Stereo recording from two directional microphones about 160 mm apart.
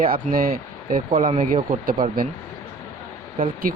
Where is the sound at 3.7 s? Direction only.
60° right (ahead or behind).